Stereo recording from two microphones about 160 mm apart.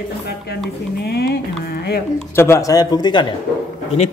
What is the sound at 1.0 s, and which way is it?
Speech, 85° left.